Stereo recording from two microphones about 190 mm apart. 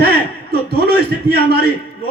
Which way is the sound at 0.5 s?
55° right (ahead or behind).